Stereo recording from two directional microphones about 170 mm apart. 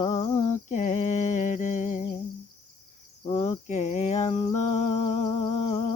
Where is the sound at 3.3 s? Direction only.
35° left (ahead or behind).